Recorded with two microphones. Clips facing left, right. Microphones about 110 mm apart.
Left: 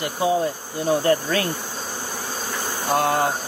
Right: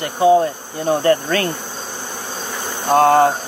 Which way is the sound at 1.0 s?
55° right (ahead or behind).